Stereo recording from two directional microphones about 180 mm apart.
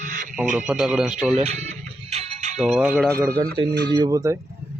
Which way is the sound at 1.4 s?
35° right (ahead or behind).